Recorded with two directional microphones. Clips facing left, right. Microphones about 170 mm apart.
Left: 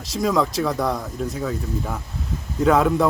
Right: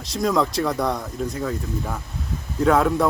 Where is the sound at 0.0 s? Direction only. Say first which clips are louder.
Even; centre (ahead or behind).